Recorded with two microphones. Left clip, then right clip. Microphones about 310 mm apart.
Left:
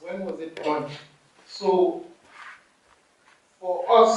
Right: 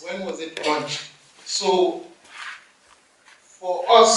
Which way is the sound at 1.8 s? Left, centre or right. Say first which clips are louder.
Right 1 dB; left.